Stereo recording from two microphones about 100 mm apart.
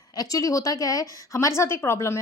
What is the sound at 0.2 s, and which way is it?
A woman's voice, 35° left (ahead or behind).